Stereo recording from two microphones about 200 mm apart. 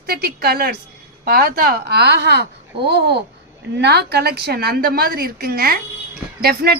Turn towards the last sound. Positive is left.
turn(degrees=-50)  # may be behind; listen again after turning